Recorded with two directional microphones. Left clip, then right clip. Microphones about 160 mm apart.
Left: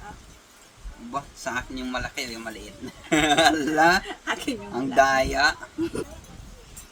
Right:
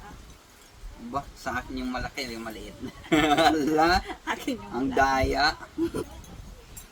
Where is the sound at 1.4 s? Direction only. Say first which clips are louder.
Left 2 dB; 20° left (ahead or behind).